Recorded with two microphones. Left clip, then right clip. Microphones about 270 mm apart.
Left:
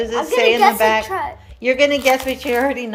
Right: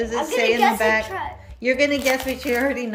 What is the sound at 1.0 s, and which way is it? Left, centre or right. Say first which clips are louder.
Speech: left 5 dB; centre.